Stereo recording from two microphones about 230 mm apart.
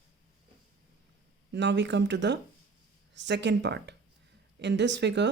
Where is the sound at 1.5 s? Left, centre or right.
Right.